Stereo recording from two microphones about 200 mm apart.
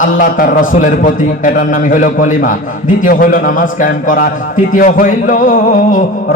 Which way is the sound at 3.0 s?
45° left (ahead or behind).